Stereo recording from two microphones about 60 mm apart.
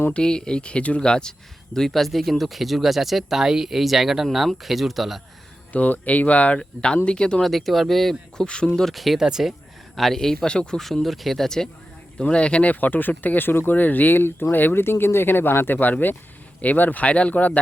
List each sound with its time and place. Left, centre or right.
0.1 s speech: centre
5.7 s speech: left
7.4 s speech: centre
10.8 s speech: centre
12.8 s speech: left